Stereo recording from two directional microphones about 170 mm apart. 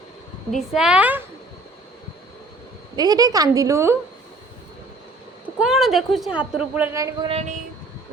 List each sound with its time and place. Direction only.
0.5 s a woman's voice: centre (ahead or behind)
2.9 s a woman's voice: 25° right (ahead or behind)
5.5 s a woman's voice: centre (ahead or behind); by 7.3 s 20° right (ahead or behind)
7.3 s speech: 40° right (ahead or behind)